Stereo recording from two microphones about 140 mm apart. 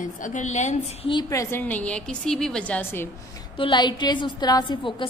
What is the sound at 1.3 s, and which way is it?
A woman's voice, 20° left (ahead or behind).